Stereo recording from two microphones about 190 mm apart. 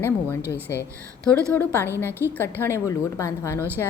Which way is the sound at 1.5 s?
10° left (ahead or behind).